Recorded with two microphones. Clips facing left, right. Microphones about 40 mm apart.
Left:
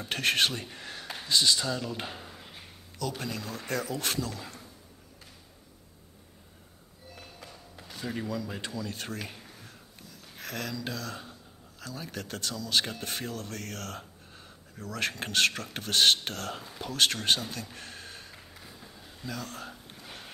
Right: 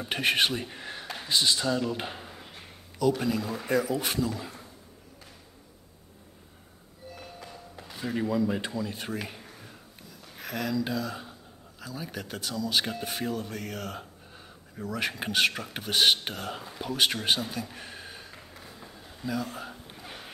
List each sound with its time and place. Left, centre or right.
0.0 s speech: centre
7.2 s a sound: centre
7.8 s speech: centre